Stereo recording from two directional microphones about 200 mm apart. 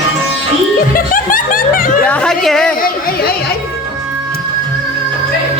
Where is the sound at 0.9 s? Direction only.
45° left (ahead or behind).